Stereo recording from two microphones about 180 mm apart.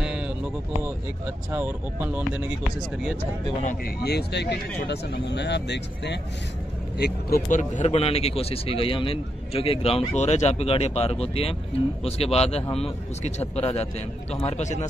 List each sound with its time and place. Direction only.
3.6 s speech: 60° left (ahead or behind)
7.0 s speech: 55° left (ahead or behind); by 14.9 s 40° left (ahead or behind)